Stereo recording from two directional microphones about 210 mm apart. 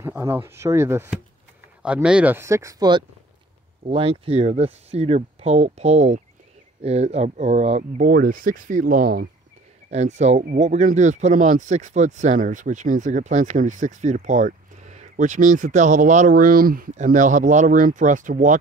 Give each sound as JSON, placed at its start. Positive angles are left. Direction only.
{"t": 0.0, "sound": "speech", "side_deg": -10}
{"t": 3.8, "sound": "speech", "side_deg": -30}
{"t": 9.8, "sound": "speech", "side_deg": -35}